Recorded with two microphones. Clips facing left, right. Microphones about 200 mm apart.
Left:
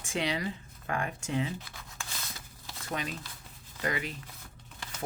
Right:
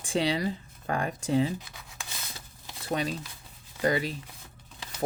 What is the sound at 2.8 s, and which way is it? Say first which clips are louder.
Speech: right 6 dB; 35° right (ahead or behind).